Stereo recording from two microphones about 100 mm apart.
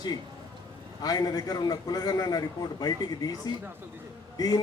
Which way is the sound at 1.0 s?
40° left (ahead or behind).